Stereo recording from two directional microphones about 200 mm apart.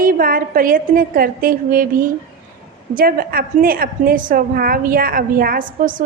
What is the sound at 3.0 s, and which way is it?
A woman's voice, 45° right (ahead or behind).